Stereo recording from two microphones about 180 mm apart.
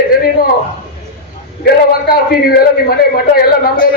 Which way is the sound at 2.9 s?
60° left (ahead or behind).